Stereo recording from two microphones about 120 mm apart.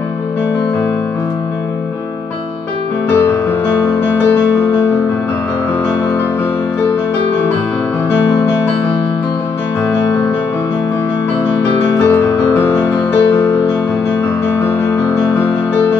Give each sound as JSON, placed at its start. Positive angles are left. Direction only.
{"t": 12.5, "sound": "music", "side_deg": 20}